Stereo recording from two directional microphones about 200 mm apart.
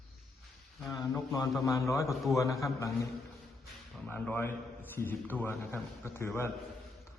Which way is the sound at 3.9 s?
5° left (ahead or behind).